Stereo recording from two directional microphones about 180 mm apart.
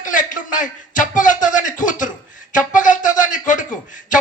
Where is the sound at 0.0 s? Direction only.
45° left (ahead or behind).